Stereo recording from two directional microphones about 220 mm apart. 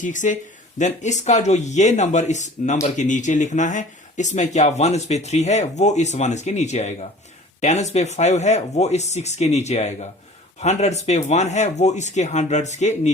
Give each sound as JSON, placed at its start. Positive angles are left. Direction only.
{"t": 0.0, "sound": "speech", "side_deg": 35}